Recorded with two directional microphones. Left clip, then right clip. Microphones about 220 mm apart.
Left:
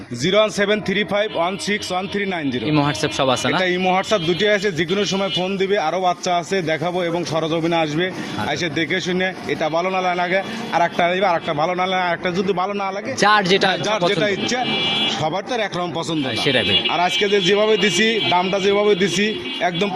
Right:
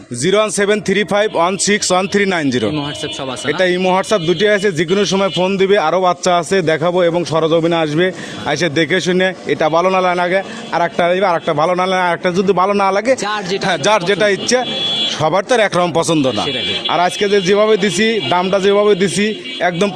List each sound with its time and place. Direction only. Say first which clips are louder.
0.3 s a man's voice: right 3 dB; 45° right (ahead or behind)
13.2 s a man's voice: left 4 dB; 20° left (ahead or behind)
14.1 s a man's voice: right 6 dB; 50° right (ahead or behind)